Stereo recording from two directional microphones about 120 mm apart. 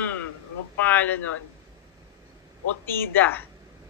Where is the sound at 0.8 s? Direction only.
15° left (ahead or behind).